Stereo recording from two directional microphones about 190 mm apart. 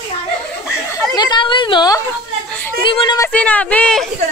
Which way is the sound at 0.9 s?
20° left (ahead or behind).